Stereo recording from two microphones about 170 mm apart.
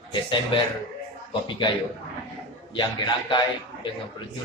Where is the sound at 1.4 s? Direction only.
25° left (ahead or behind).